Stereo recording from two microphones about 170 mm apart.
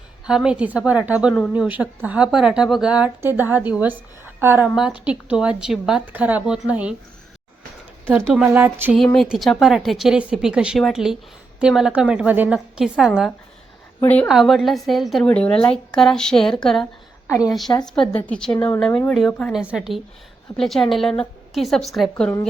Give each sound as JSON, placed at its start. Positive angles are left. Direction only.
{"t": 0.3, "sound": "a woman's voice", "side_deg": -5}
{"t": 8.0, "sound": "a woman's voice", "side_deg": -5}
{"t": 14.0, "sound": "a woman's voice", "side_deg": 10}
{"t": 14.3, "sound": "a woman's voice", "side_deg": 0}
{"t": 17.2, "sound": "a woman's voice", "side_deg": 15}
{"t": 18.0, "sound": "a woman's voice", "side_deg": 35}
{"t": 18.3, "sound": "a woman's voice", "side_deg": 5}
{"t": 19.5, "sound": "a woman's voice", "side_deg": -5}